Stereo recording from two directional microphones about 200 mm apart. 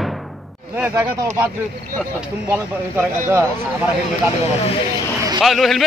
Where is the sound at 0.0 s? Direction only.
Centre (ahead or behind).